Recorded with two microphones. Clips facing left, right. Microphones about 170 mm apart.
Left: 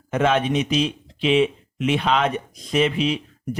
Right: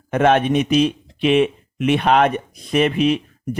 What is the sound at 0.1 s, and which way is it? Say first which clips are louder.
Speech: right 4 dB; 55° right (ahead or behind).